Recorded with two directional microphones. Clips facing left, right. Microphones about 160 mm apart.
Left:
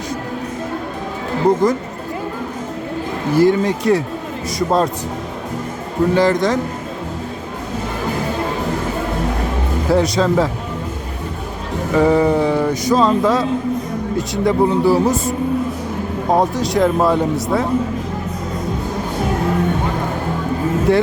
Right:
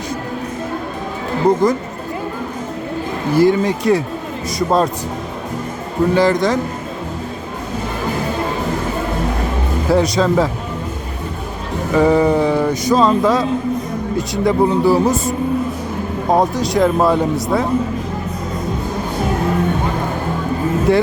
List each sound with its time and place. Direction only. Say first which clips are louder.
1.5 s speech: right 1 dB; 15° right (ahead or behind)
3.3 s speech: even; 10° right (ahead or behind)
6.1 s speech: right 1 dB; 10° right (ahead or behind)
9.9 s speech: right 1 dB; 10° right (ahead or behind)
11.9 s speech: right 1 dB; 15° right (ahead or behind)
16.3 s speech: right 1 dB; 15° right (ahead or behind)
20.9 s speech: right 1 dB; 10° right (ahead or behind)